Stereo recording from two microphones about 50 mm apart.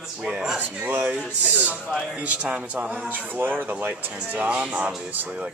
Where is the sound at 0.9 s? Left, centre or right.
Right.